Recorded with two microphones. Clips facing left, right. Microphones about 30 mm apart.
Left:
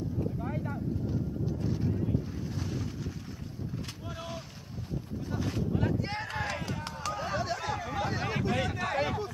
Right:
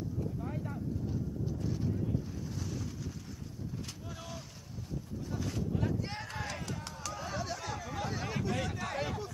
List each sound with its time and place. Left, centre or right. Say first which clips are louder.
0.2 s horse: left 5 dB; left
5.3 s run: left 4 dB; left